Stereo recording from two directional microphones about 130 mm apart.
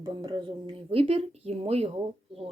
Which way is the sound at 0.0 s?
30° right (ahead or behind).